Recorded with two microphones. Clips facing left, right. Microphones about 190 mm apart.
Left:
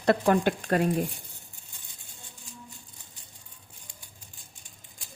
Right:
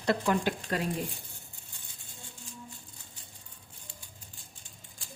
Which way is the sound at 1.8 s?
15° left (ahead or behind).